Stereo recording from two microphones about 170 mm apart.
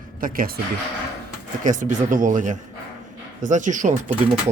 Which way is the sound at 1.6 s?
50° right (ahead or behind).